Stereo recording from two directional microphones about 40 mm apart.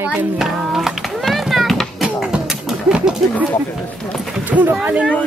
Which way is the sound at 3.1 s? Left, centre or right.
Centre.